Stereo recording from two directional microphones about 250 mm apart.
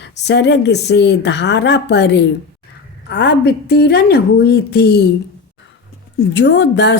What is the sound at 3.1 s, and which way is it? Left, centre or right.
A woman's voice, left.